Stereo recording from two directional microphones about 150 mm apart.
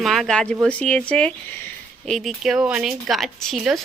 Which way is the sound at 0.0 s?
Centre (ahead or behind).